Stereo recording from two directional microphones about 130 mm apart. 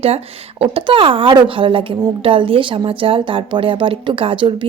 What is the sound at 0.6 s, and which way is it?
A woman's voice, 45° right (ahead or behind).